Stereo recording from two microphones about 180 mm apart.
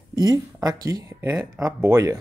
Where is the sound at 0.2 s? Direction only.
20° right (ahead or behind).